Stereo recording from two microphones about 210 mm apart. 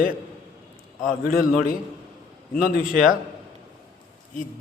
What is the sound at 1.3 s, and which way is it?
A man's voice, 45° left (ahead or behind).